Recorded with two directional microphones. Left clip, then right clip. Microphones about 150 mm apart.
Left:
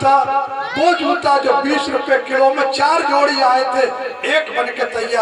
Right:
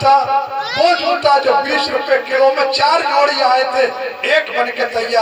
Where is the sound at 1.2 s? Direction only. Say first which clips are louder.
Right 2 dB; 50° left (ahead or behind).